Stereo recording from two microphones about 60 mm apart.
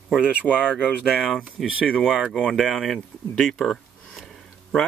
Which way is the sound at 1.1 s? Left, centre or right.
Centre.